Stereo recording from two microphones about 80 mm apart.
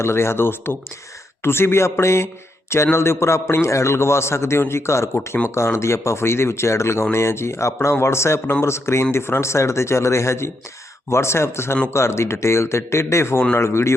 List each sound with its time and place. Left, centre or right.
0.0 s speech: left